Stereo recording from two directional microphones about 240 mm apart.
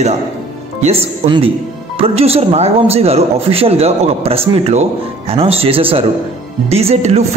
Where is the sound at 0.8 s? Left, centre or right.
Right.